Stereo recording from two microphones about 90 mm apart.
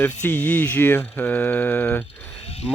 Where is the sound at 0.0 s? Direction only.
20° left (ahead or behind).